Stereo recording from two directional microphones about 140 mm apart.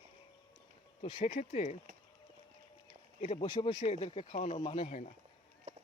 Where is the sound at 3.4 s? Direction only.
35° left (ahead or behind).